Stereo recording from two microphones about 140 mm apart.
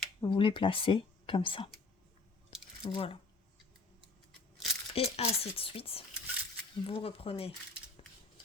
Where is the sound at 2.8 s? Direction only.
40° left (ahead or behind).